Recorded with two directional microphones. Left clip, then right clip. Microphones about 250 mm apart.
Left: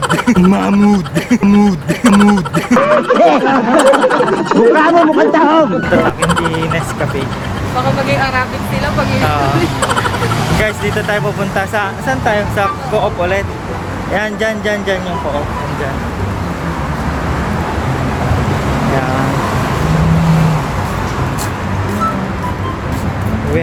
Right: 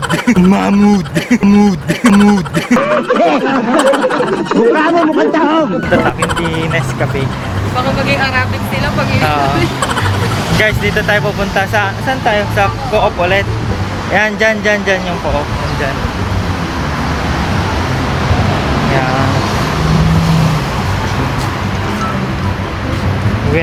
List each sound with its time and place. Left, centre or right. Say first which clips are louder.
0.1 s speech: even; centre
7.8 s speech: even; centre
10.6 s speech: right 3 dB; centre
14.1 s speech: right 5 dB; centre